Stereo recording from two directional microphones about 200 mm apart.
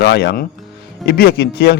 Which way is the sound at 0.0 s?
60° left (ahead or behind).